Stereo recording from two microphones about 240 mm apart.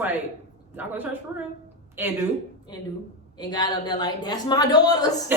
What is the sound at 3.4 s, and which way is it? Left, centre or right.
A woman's voice, centre.